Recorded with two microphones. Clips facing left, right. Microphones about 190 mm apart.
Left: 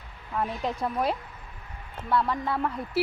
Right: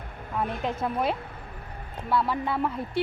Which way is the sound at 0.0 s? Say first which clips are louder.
Right 8 dB; 55° right (ahead or behind).